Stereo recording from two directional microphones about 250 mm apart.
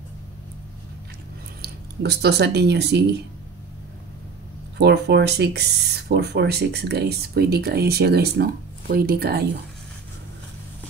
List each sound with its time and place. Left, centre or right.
1.6 s speech: right
4.7 s speech: right